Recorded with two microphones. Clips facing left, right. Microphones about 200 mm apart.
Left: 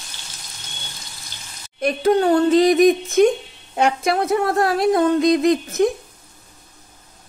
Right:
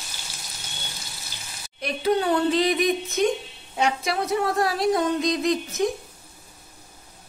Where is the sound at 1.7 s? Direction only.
50° left (ahead or behind).